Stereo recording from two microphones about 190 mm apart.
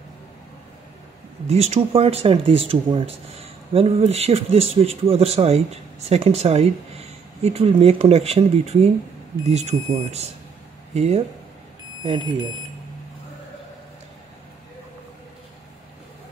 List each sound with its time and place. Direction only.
1.5 s speech: 35° right (ahead or behind)